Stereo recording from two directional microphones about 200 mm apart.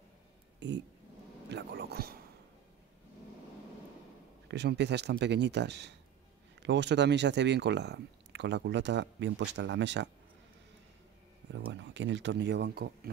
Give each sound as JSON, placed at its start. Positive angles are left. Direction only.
{"t": 0.6, "sound": "speech", "side_deg": -60}
{"t": 1.5, "sound": "whispering", "side_deg": -55}
{"t": 4.5, "sound": "speech", "side_deg": -60}
{"t": 11.5, "sound": "speech", "side_deg": -60}